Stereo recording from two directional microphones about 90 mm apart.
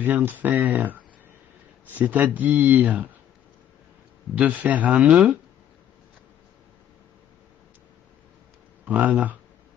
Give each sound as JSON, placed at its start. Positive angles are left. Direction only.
{"t": 0.0, "sound": "speech", "side_deg": -20}
{"t": 4.4, "sound": "speech", "side_deg": -15}
{"t": 8.8, "sound": "speech", "side_deg": -20}